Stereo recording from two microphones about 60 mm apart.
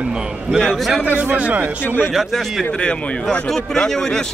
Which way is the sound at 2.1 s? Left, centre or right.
Centre.